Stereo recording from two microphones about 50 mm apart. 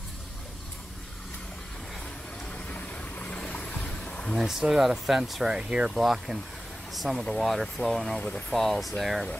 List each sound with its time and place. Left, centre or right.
2.5 s vehicle: left
4.4 s speech: centre
5.9 s speech: centre